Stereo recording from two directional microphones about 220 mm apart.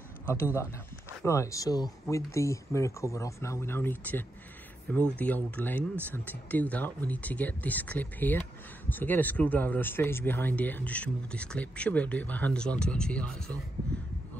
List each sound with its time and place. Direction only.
1.2 s speech: 15° left (ahead or behind)